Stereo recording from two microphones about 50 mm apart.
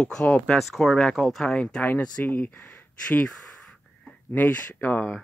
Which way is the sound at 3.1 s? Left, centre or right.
Left.